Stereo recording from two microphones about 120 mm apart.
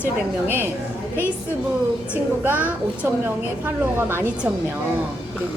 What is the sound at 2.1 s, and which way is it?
A woman's voice, 15° right (ahead or behind).